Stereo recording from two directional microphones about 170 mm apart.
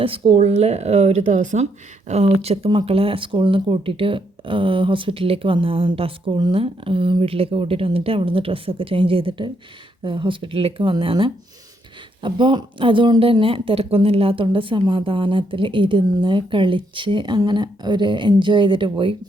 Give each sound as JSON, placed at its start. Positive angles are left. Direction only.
{"t": 0.0, "sound": "speech", "side_deg": -30}